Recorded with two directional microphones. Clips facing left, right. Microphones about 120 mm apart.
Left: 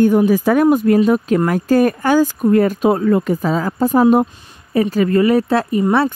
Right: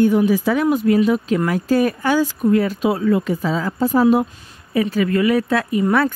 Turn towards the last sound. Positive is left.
turn(degrees=30)  # may be behind; listen again after turning